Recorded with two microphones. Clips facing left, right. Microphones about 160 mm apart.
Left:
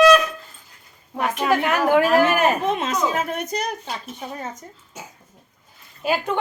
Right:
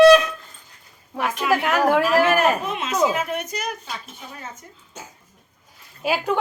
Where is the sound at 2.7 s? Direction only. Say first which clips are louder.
Even; 40° left (ahead or behind).